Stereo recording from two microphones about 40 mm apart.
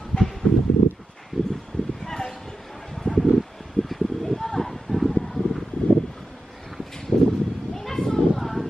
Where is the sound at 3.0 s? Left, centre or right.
Left.